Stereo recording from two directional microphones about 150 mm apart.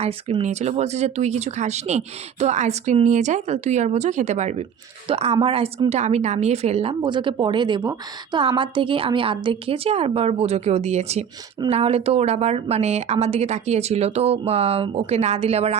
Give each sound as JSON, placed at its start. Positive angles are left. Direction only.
{"t": 0.0, "sound": "speech", "side_deg": -45}
{"t": 7.0, "sound": "a woman's voice", "side_deg": -35}